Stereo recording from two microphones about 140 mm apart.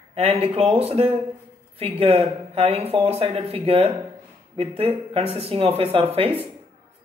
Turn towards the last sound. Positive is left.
turn(degrees=-40)  # may be behind; listen again after turning